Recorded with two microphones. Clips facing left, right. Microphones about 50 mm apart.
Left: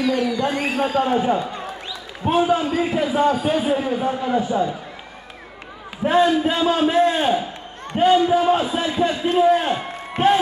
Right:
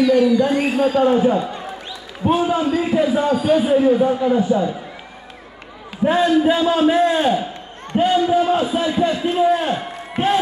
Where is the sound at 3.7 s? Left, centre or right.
Centre.